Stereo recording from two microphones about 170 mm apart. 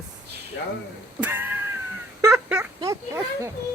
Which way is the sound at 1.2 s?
15° right (ahead or behind).